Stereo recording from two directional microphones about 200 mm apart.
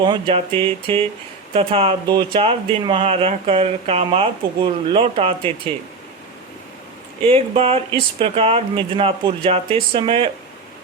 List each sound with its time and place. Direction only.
0.0 s speech: 25° right (ahead or behind)
7.3 s speech: 30° right (ahead or behind)